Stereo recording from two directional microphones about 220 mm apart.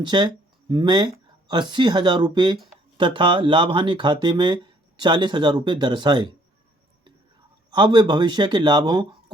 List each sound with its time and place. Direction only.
0.0 s speech: 20° right (ahead or behind)
7.7 s speech: 20° right (ahead or behind)